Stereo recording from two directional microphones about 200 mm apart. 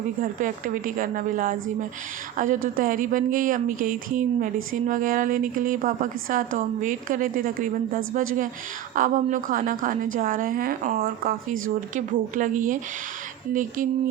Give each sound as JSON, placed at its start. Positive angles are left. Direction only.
{"t": 0.2, "sound": "a woman's voice", "side_deg": -40}
{"t": 2.7, "sound": "a woman's voice", "side_deg": -45}